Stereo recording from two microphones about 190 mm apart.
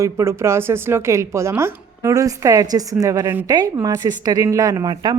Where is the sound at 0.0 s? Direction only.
15° right (ahead or behind).